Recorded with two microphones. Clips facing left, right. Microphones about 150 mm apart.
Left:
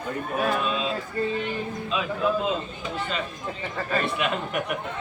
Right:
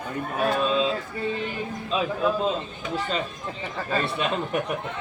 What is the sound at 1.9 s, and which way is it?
Speech, 35° right (ahead or behind).